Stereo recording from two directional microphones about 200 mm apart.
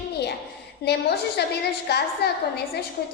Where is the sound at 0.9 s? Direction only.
55° left (ahead or behind).